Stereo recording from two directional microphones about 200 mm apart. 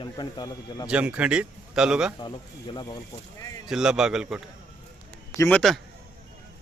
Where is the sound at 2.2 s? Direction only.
20° left (ahead or behind).